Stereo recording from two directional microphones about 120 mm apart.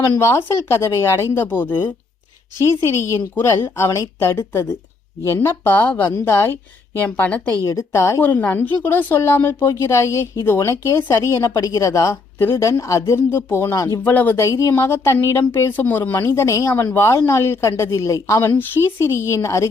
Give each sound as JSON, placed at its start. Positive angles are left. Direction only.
{"t": 0.2, "sound": "a woman's voice", "side_deg": 20}
{"t": 7.6, "sound": "a woman's voice", "side_deg": 25}
{"t": 14.0, "sound": "a woman's voice", "side_deg": 15}